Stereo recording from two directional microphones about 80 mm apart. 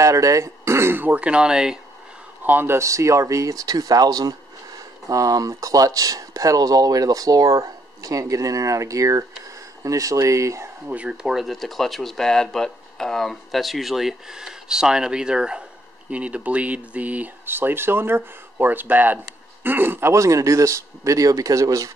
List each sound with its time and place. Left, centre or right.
0.0 s speech: right; by 1.8 s centre
2.4 s speech: right
10.9 s speech: centre
11.2 s speech: centre; by 21.9 s right